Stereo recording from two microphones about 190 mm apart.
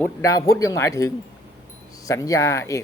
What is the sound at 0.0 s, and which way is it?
Speech, 15° left (ahead or behind).